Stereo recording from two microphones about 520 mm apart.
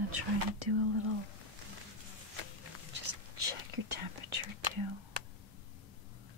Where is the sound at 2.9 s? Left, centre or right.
Right.